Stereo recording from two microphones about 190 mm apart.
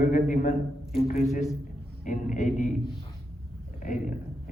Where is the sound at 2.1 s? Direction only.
40° left (ahead or behind).